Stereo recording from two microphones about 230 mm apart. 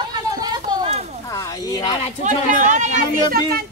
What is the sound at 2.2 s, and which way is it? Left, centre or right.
Speech, right.